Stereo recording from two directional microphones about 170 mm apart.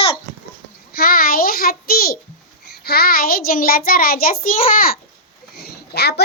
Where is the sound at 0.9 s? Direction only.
60° left (ahead or behind).